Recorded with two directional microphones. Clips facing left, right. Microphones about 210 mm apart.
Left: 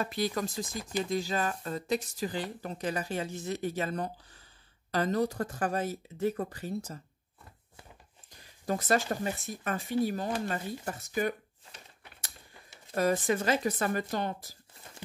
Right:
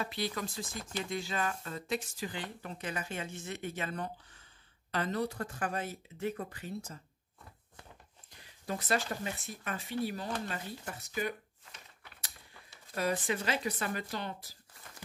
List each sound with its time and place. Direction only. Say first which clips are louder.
0.0 s speech: left 5 dB; 45° left (ahead or behind)
0.7 s speech: left 6 dB; 15° left (ahead or behind)
1.1 s speech: left 3 dB; 40° left (ahead or behind)
8.6 s speech: left 5 dB; 45° left (ahead or behind)
12.9 s speech: left 5 dB; 45° left (ahead or behind)